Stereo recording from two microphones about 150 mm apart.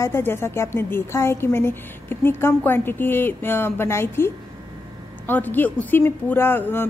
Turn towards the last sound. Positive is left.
turn(degrees=15)  # may be behind; listen again after turning